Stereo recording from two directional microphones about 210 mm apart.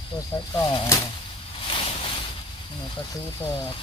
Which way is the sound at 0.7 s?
20° left (ahead or behind).